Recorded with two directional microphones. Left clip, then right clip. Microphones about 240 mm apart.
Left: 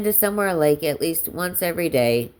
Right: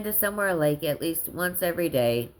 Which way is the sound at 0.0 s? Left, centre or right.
Left.